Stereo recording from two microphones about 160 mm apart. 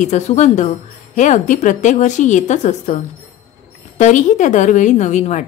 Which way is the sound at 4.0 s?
50° left (ahead or behind).